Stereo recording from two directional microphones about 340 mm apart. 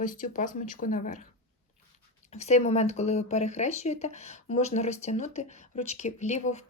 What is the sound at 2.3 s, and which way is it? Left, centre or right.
Speech, centre.